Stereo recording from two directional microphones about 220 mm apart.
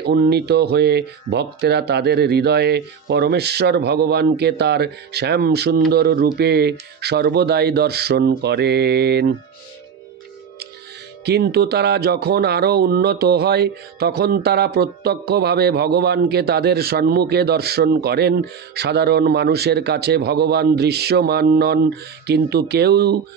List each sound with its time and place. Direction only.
0.0 s speech: 50° right (ahead or behind)
11.2 s speech: 45° right (ahead or behind)